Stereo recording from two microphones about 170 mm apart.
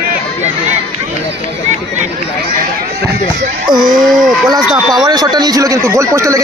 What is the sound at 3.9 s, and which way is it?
Speech, centre (ahead or behind).